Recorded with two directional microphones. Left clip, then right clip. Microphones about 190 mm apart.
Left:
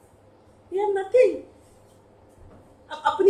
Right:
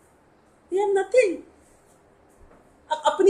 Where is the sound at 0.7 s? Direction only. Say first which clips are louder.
Even; 50° right (ahead or behind).